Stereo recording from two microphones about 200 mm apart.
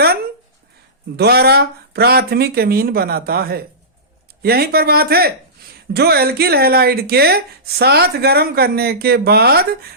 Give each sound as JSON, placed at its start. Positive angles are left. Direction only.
{"t": 1.1, "sound": "speech", "side_deg": -55}